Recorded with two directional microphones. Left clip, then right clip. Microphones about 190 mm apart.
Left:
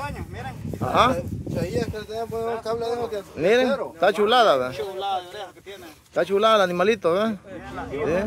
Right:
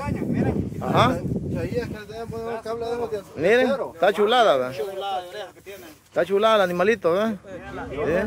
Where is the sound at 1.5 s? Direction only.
40° left (ahead or behind); by 2.9 s 25° left (ahead or behind).